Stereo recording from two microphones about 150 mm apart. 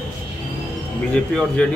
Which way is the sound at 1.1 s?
10° left (ahead or behind).